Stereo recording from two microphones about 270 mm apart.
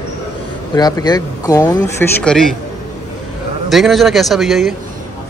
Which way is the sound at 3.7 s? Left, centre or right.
Centre.